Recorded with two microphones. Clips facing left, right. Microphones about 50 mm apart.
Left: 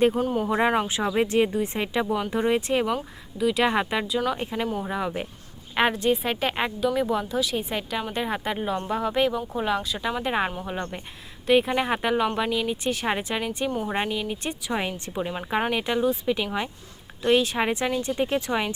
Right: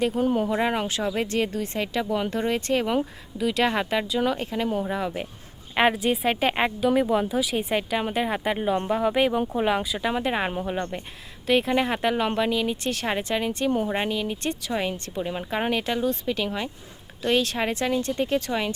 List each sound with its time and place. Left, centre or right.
0.2 s speech: centre
0.4 s speech: centre
2.8 s speech: centre